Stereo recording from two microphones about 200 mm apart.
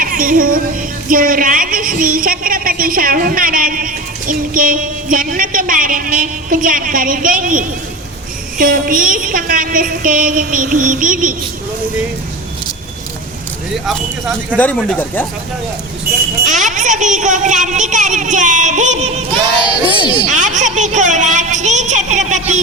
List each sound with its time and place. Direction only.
0.0 s music: 45° right (ahead or behind)
1.0 s a woman's voice: 45° right (ahead or behind)
13.8 s speech: 5° left (ahead or behind)
16.5 s speech: 40° right (ahead or behind)
20.3 s speech: 35° right (ahead or behind)